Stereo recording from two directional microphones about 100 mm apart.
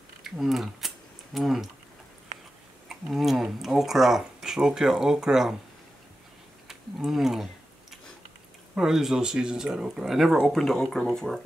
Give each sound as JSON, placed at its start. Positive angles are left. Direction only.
{"t": 0.2, "sound": "speech", "side_deg": -5}
{"t": 2.9, "sound": "speech", "side_deg": 0}
{"t": 6.7, "sound": "a sound", "side_deg": 0}
{"t": 8.7, "sound": "speech", "side_deg": -5}